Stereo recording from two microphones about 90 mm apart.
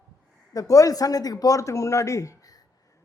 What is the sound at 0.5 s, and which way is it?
A man's voice, 40° left (ahead or behind).